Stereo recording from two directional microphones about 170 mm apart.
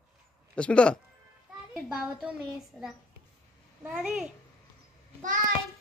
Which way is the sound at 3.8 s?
5° right (ahead or behind).